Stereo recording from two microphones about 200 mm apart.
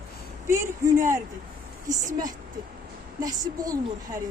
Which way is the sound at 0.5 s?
15° right (ahead or behind).